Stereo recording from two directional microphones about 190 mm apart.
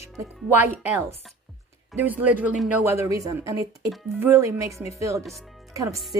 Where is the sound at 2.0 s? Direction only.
10° right (ahead or behind).